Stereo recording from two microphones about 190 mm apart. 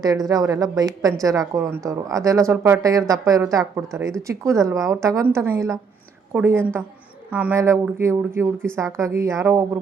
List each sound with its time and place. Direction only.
0.0 s a woman's voice: 20° right (ahead or behind)